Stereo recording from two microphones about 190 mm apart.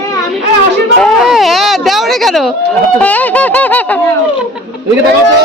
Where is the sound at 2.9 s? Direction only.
10° left (ahead or behind).